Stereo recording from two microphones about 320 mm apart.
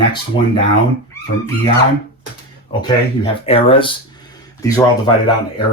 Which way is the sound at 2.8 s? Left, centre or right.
Centre.